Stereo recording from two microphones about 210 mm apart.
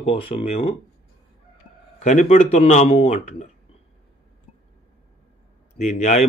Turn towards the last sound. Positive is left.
turn(degrees=35)  # may be behind; listen again after turning